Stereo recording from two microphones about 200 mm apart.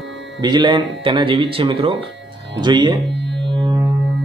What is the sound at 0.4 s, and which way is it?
Mantra, 20° right (ahead or behind).